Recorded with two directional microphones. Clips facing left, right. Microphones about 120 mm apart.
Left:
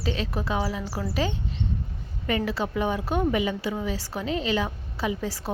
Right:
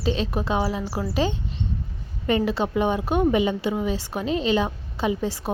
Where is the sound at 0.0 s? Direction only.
20° right (ahead or behind).